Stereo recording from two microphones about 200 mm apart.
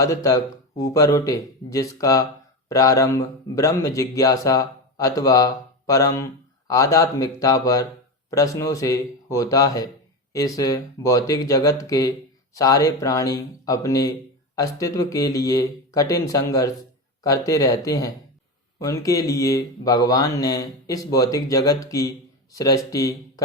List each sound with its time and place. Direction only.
0.0 s a man's voice: 15° left (ahead or behind)